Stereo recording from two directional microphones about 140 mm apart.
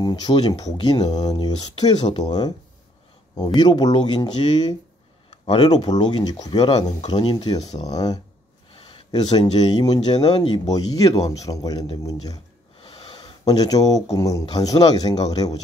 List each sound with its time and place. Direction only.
0.0 s speech: 30° left (ahead or behind)
5.3 s a sound: 40° left (ahead or behind)
5.8 s speech: 30° left (ahead or behind)
8.7 s a sound: 40° left (ahead or behind)
9.5 s speech: 30° left (ahead or behind)
12.8 s sniff: 35° left (ahead or behind)
14.1 s speech: 25° left (ahead or behind)